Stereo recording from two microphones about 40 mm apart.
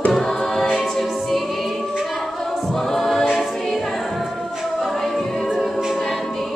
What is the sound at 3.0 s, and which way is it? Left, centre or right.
Choir, centre.